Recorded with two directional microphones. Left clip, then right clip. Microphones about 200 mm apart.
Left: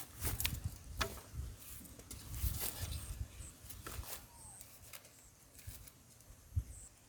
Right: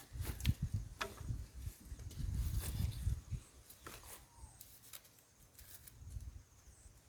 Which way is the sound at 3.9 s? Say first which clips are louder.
Left 3 dB; 20° left (ahead or behind).